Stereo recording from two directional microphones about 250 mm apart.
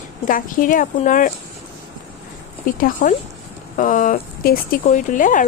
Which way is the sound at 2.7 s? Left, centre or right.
Left.